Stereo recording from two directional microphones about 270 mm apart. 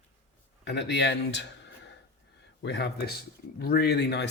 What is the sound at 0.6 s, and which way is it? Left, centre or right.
Speech, left.